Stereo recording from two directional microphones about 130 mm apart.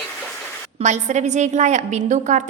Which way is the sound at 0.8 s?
65° right (ahead or behind).